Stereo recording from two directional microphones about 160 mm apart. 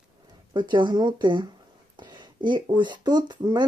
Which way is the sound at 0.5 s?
30° right (ahead or behind).